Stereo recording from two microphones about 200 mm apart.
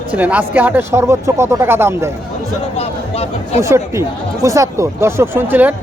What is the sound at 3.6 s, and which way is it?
A man's voice, 15° right (ahead or behind).